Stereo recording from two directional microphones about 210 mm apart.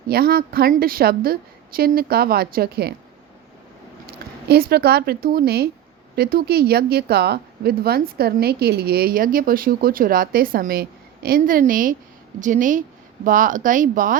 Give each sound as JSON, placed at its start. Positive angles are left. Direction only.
{"t": 0.1, "sound": "speech", "side_deg": -45}
{"t": 4.4, "sound": "speech", "side_deg": -50}